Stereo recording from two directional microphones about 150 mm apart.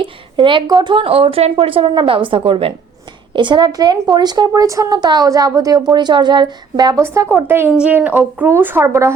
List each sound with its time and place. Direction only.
0.0 s a woman's voice: 35° right (ahead or behind)
7.0 s a woman's voice: 15° right (ahead or behind)